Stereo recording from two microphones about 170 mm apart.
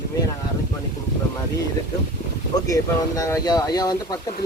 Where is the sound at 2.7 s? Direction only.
20° left (ahead or behind).